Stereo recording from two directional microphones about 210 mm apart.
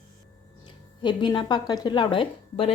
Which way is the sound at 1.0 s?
20° left (ahead or behind).